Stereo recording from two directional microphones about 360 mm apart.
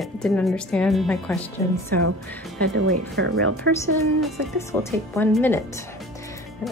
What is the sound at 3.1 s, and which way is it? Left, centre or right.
Speech, right.